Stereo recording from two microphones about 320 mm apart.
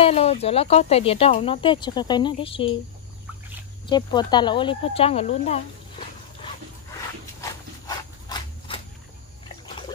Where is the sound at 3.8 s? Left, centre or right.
Centre.